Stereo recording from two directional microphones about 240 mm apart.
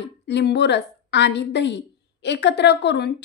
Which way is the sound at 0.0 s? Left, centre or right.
Left.